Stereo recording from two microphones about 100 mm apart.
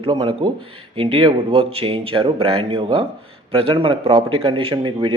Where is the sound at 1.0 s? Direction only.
65° right (ahead or behind).